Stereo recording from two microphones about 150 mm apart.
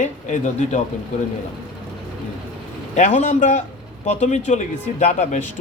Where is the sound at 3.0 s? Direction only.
55° left (ahead or behind).